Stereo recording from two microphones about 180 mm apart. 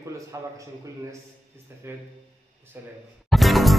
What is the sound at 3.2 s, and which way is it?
Music, centre (ahead or behind).